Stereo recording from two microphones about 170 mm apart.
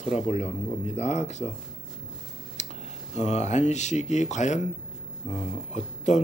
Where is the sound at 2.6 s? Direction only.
45° left (ahead or behind).